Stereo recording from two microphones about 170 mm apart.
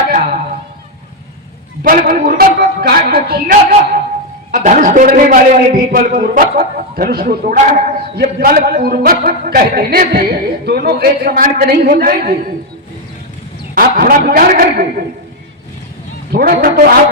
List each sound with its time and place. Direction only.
1.8 s a man's voice: 55° right (ahead or behind)
13.7 s a man's voice: 60° right (ahead or behind)
16.3 s a man's voice: 60° right (ahead or behind)